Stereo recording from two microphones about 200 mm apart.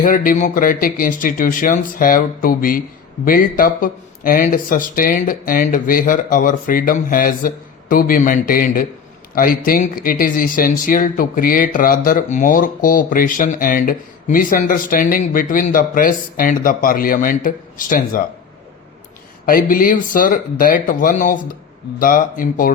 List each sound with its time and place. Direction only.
0.0 s speech: 45° left (ahead or behind)
19.5 s speech: 45° left (ahead or behind)